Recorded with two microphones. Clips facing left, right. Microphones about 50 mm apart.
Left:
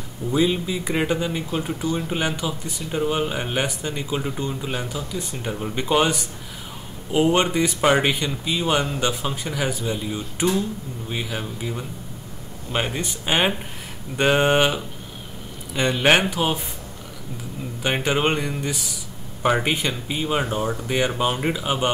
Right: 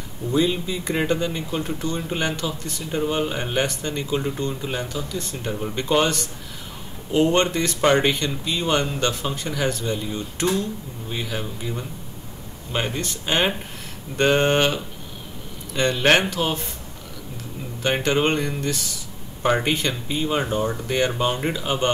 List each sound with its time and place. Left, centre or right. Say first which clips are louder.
0.3 s speech: left 1 dB; centre
17.8 s speech: right 1 dB; centre